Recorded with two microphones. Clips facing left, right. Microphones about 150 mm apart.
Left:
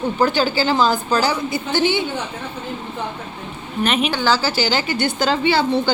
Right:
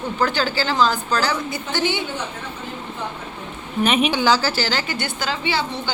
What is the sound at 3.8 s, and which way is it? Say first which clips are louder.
Speech: right 1 dB; 5° right (ahead or behind).